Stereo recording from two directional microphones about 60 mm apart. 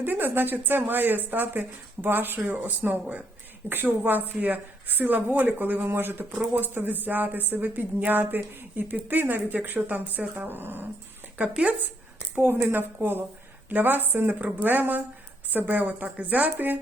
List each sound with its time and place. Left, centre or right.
0.0 s speech: right
12.4 s a woman's voice: right